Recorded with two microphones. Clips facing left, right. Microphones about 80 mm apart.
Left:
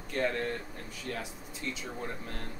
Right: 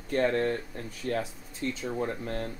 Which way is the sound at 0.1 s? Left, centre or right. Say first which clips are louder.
Right 6 dB; right.